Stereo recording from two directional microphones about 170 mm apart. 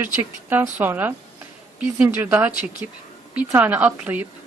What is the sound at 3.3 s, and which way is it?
Speech, 10° right (ahead or behind).